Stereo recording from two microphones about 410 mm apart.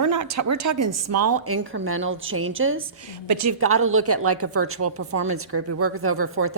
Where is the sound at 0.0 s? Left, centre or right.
Right.